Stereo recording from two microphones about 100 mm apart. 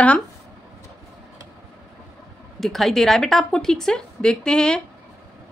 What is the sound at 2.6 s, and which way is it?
A woman's voice, centre (ahead or behind).